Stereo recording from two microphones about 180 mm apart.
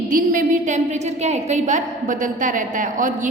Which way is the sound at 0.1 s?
50° right (ahead or behind).